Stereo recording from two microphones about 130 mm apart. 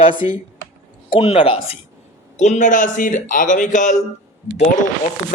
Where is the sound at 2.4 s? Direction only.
65° left (ahead or behind).